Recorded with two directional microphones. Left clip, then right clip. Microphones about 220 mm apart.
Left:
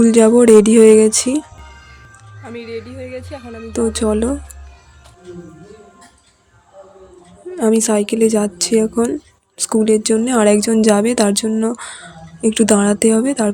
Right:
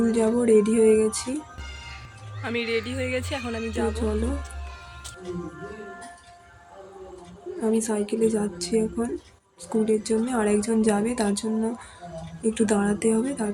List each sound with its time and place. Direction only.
0.0 s speech: 45° left (ahead or behind)
2.4 s speech: 5° left (ahead or behind)
7.6 s speech: 45° left (ahead or behind)